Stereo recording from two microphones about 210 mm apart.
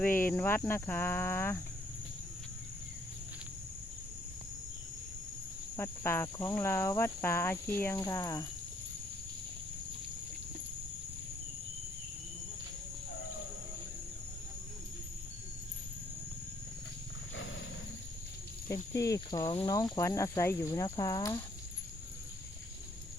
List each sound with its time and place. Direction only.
0.0 s cricket: 10° left (ahead or behind)
5.7 s cricket: 10° left (ahead or behind)
18.9 s cricket: 15° left (ahead or behind)